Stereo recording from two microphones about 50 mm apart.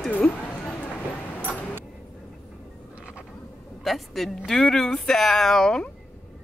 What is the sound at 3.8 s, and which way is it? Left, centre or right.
Speech, centre.